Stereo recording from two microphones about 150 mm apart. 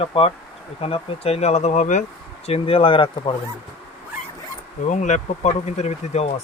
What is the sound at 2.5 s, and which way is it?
Speech, 40° left (ahead or behind).